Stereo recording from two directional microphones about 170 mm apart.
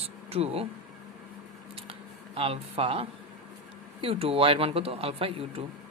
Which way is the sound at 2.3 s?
35° right (ahead or behind).